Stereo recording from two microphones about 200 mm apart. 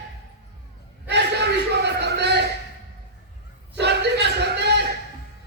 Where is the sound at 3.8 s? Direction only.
55° right (ahead or behind).